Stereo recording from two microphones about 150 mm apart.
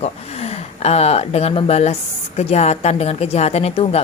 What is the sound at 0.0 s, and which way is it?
Speech, 45° left (ahead or behind).